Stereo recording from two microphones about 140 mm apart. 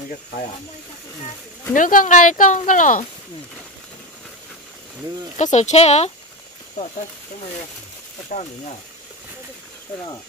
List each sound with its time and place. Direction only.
1.7 s speech: 70° left (ahead or behind)
5.4 s speech: 55° left (ahead or behind)
8.3 s speech: 70° left (ahead or behind)